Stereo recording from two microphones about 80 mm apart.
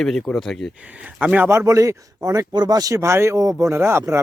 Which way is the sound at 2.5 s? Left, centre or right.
Right.